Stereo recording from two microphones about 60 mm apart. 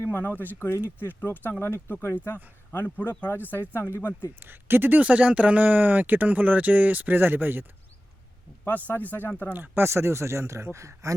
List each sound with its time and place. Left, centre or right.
0.0 s speech: left
1.6 s speech: left
4.4 s speech: right
8.6 s speech: left
9.5 s speech: right